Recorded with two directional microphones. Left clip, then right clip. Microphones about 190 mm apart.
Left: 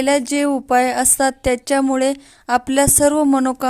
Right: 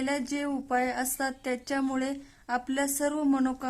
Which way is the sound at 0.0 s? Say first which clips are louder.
Left 14 dB; 35° left (ahead or behind).